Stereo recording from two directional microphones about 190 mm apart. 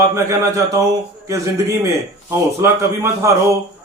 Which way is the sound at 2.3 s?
15° right (ahead or behind).